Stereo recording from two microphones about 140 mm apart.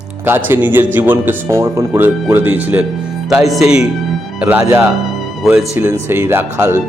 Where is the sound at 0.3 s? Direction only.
15° right (ahead or behind).